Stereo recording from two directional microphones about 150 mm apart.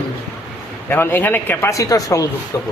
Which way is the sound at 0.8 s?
15° left (ahead or behind).